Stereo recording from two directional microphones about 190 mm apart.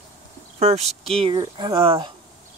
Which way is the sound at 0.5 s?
35° right (ahead or behind).